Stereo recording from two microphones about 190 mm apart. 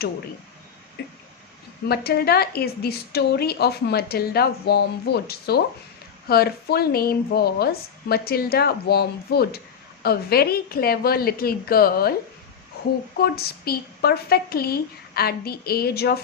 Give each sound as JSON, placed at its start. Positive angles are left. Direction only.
{"t": 1.0, "sound": "a sound", "side_deg": 60}
{"t": 1.9, "sound": "a woman's voice", "side_deg": 55}
{"t": 13.1, "sound": "a woman's voice", "side_deg": 55}